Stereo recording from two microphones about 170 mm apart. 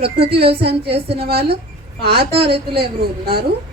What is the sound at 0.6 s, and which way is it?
A woman's voice, 70° right (ahead or behind).